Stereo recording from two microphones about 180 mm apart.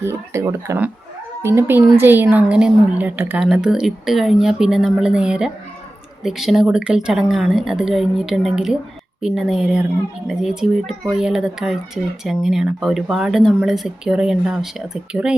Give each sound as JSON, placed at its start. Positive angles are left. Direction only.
{"t": 0.0, "sound": "a woman's voice", "side_deg": -15}